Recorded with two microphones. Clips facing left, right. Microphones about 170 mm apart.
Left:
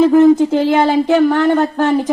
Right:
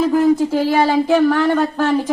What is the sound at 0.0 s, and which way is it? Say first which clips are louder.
Speech: left 5 dB; 25° left (ahead or behind).